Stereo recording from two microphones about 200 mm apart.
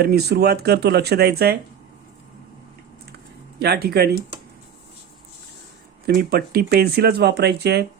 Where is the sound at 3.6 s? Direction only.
55° right (ahead or behind).